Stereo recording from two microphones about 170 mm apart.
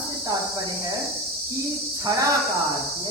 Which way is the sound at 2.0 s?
20° right (ahead or behind).